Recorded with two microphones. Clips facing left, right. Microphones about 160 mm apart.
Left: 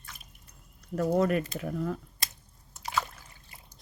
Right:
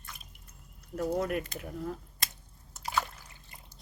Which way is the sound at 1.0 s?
90° left.